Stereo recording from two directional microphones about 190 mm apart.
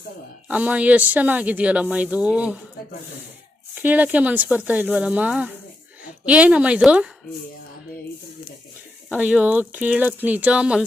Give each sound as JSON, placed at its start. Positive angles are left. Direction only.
{"t": 0.4, "sound": "speech", "side_deg": -10}
{"t": 3.8, "sound": "speech", "side_deg": -10}
{"t": 9.0, "sound": "speech", "side_deg": -5}